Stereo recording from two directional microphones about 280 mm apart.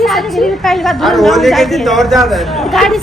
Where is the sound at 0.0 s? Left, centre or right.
Centre.